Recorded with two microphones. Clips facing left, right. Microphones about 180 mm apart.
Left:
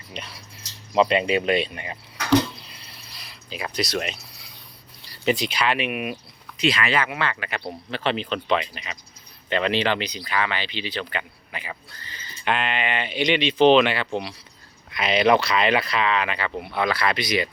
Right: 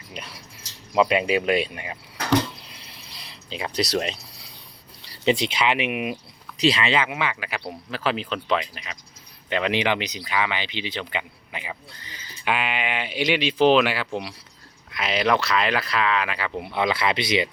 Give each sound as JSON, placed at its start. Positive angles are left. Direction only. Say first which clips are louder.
{"t": 0.1, "sound": "a sound", "louder": "left 1 dB", "side_deg": -10}
{"t": 0.9, "sound": "speech", "louder": "even", "side_deg": -5}
{"t": 2.8, "sound": "a sound", "louder": "right 1 dB", "side_deg": -20}
{"t": 5.1, "sound": "speech", "louder": "right 1 dB", "side_deg": -25}
{"t": 6.6, "sound": "speech", "louder": "right 1 dB", "side_deg": -30}
{"t": 16.6, "sound": "speech", "louder": "right 1 dB", "side_deg": -20}